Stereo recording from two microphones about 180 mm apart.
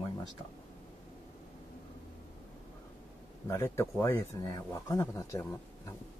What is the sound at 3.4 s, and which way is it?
Speech, 15° left (ahead or behind).